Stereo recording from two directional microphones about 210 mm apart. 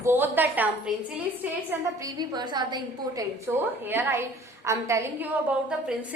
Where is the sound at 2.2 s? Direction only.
20° right (ahead or behind).